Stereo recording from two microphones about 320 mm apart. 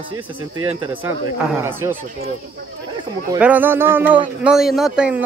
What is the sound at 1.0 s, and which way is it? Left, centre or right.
Speech, centre.